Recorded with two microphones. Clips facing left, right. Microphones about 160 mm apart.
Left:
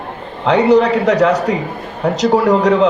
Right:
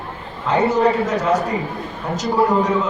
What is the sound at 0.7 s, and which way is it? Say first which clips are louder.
A man's voice: left 6 dB; 80° left.